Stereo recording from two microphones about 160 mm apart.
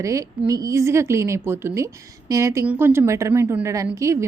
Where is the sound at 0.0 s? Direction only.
20° right (ahead or behind).